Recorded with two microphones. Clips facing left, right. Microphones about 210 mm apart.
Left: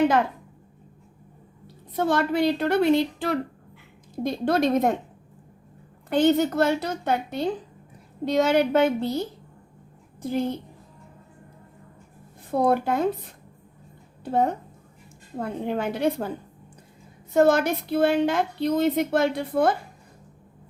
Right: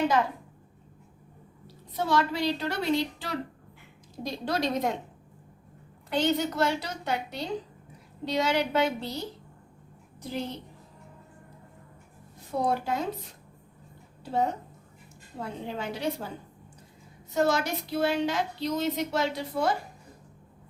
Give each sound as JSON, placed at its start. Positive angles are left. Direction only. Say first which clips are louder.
{"t": 1.6, "sound": "a woman's voice", "louder": "left 6 dB", "side_deg": 55}
{"t": 6.1, "sound": "a woman's voice", "louder": "left 7 dB", "side_deg": 50}
{"t": 12.5, "sound": "a woman's voice", "louder": "left 6 dB", "side_deg": 55}
{"t": 17.3, "sound": "a woman's voice", "louder": "left 7 dB", "side_deg": 55}